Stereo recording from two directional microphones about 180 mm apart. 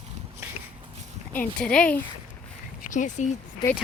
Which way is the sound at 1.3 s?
10° left (ahead or behind).